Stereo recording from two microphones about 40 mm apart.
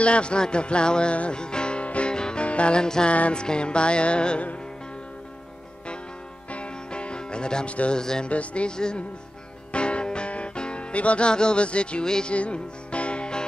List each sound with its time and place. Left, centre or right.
0.0 s speech: left
1.3 s music: left
2.1 s music: centre
3.1 s music: left
3.4 s speech: left
6.5 s music: left
7.9 s speech: centre
8.3 s music: left
8.7 s speech: centre
9.7 s music: left
12.4 s music: left